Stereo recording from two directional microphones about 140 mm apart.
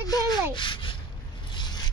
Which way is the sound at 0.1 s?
35° left (ahead or behind).